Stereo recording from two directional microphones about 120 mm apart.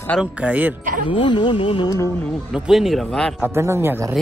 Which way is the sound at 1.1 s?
40° left (ahead or behind).